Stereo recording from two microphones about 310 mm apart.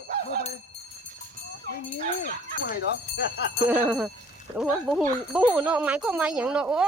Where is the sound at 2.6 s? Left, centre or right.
Left.